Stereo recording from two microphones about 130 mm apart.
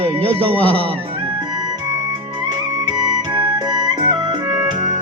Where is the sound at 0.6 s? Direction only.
10° left (ahead or behind).